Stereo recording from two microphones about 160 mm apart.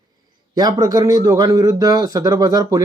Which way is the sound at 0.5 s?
25° right (ahead or behind).